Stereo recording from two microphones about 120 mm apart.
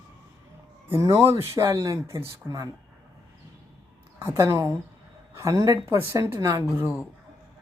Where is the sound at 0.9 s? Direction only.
20° right (ahead or behind).